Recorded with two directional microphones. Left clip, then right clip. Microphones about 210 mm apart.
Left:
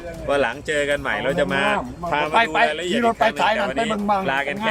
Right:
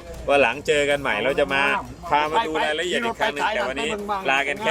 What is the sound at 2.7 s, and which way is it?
Speech, centre (ahead or behind).